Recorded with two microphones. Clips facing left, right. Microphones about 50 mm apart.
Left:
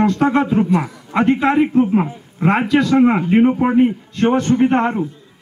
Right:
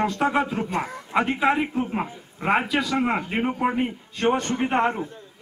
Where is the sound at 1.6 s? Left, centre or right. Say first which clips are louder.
Left 11 dB; centre.